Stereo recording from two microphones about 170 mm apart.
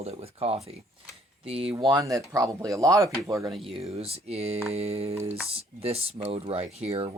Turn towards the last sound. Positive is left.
turn(degrees=-40)  # may be behind; listen again after turning